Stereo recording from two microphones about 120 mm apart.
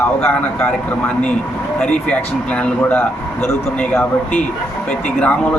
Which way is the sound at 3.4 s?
20° left (ahead or behind).